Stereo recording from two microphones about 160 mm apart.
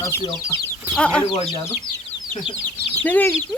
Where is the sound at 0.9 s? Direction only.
5° left (ahead or behind).